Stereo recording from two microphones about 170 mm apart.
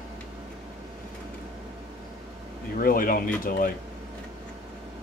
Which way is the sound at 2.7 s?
55° left (ahead or behind).